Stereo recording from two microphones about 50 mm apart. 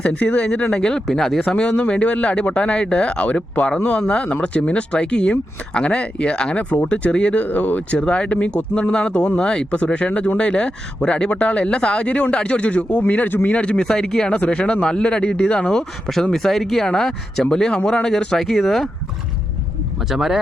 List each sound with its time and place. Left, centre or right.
0.0 s speech: left; by 1.4 s centre
1.4 s speech: left
7.9 s speech: left
13.6 s speech: centre
16.3 s speech: centre
20.1 s speech: centre